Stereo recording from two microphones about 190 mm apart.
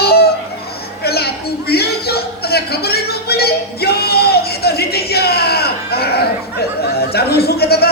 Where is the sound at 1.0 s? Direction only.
55° left (ahead or behind).